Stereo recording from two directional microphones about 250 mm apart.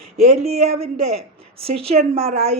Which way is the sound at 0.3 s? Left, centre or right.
Right.